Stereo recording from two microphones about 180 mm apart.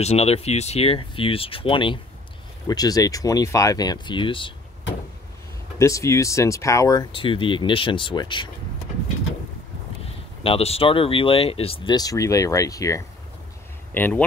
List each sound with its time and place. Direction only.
0.0 s speech: 35° left (ahead or behind)
5.8 s speech: 15° left (ahead or behind)
10.4 s speech: 35° left (ahead or behind); by 14.2 s 10° left (ahead or behind)